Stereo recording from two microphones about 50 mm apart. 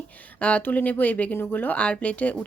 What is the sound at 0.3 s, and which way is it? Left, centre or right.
Speech, left.